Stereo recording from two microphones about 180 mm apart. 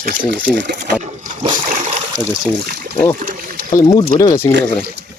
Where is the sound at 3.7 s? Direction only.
20° left (ahead or behind).